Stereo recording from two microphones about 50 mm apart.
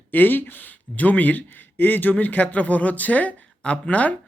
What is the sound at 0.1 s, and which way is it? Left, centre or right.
Speech, left.